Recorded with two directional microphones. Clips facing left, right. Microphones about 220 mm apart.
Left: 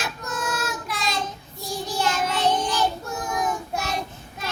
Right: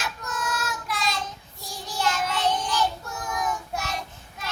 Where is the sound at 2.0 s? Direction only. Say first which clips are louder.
Left 1 dB; 25° left (ahead or behind).